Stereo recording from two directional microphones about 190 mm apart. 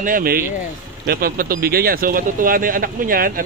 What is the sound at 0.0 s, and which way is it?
A man's voice, 50° right (ahead or behind).